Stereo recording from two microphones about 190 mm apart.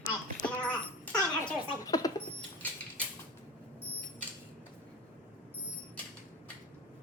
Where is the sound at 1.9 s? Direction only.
20° left (ahead or behind).